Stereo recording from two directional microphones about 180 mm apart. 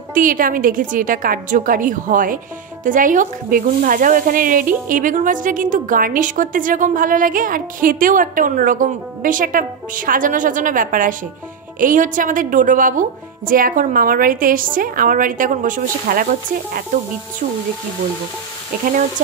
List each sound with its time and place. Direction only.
0.1 s speech: 50° right (ahead or behind)